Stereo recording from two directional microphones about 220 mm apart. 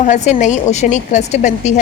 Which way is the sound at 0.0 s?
35° left (ahead or behind).